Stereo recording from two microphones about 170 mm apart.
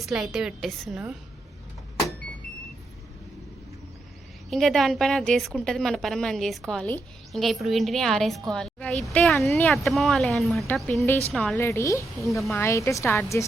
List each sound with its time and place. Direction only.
0.0 s a woman's voice: centre (ahead or behind)
4.4 s a woman's voice: centre (ahead or behind)
11.5 s speech: 15° left (ahead or behind)